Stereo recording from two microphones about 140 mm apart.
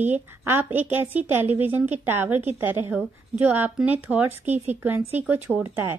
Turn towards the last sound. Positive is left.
turn(degrees=-15)  # may be behind; listen again after turning